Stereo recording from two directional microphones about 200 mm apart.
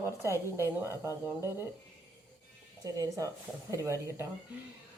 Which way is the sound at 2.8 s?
15° right (ahead or behind).